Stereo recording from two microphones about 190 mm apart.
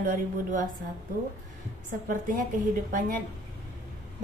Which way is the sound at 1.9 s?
45° right (ahead or behind).